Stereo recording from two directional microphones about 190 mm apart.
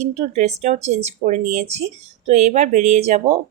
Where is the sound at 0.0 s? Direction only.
35° right (ahead or behind).